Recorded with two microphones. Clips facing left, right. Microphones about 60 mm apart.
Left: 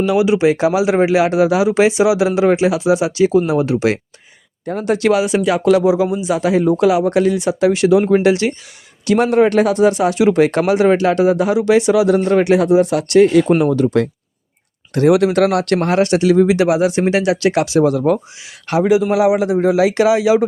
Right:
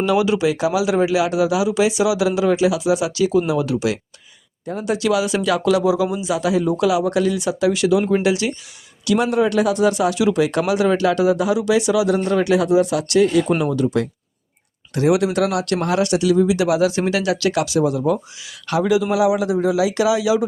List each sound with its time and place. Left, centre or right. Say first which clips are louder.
0.0 s speech: left 3 dB; centre
0.3 s speech: left 5 dB; left
5.2 s speech: left 4 dB; left
16.6 s speech: left 3 dB; left
17.8 s speech: left 4 dB; left
18.7 s speech: left 4 dB; left